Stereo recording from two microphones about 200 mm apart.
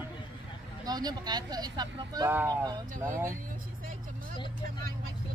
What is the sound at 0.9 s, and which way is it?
Speech, 20° right (ahead or behind).